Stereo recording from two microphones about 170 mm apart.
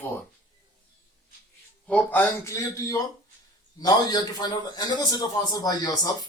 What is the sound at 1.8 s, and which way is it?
A man's voice, 10° left (ahead or behind).